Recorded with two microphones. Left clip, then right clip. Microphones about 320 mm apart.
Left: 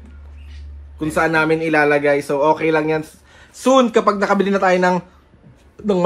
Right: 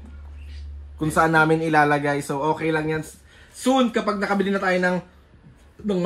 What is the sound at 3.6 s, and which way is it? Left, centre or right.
Speech, left.